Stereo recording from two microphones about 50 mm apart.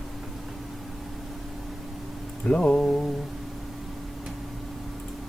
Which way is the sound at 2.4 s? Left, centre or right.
Centre.